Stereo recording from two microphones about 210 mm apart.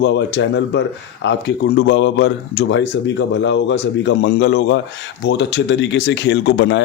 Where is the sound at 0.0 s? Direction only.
55° left (ahead or behind).